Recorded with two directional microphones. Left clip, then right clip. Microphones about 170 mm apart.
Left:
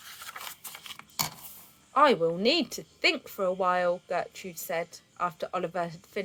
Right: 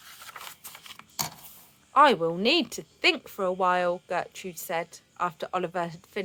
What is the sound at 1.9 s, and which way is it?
A woman's voice, 20° right (ahead or behind).